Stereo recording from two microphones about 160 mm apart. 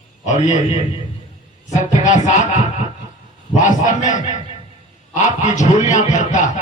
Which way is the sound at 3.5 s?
50° left (ahead or behind).